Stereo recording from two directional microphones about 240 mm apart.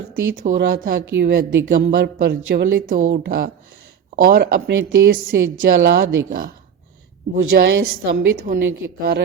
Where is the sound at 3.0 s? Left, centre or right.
Right.